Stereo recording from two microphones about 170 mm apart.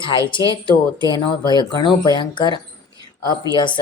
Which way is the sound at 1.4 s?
25° left (ahead or behind).